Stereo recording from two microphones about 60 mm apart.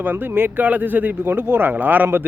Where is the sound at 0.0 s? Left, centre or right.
Right.